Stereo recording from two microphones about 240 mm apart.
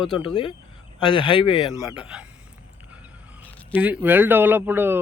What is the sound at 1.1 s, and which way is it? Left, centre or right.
Speech, centre.